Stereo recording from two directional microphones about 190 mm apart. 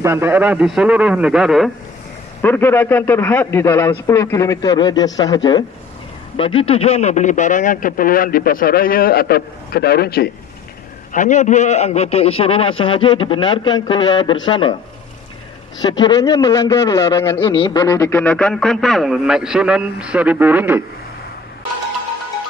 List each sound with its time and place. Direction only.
0.0 s a man's voice: 15° right (ahead or behind)
2.4 s a man's voice: 10° left (ahead or behind); by 10.3 s 55° left (ahead or behind)
11.1 s a man's voice: 40° left (ahead or behind); by 14.8 s 25° left (ahead or behind)
15.8 s a man's voice: 20° left (ahead or behind)
17.4 s a man's voice: 25° left (ahead or behind)
18.2 s a man's voice: 5° left (ahead or behind)